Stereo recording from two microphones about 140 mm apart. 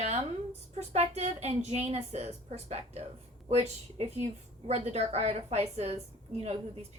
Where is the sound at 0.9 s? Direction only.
50° right (ahead or behind).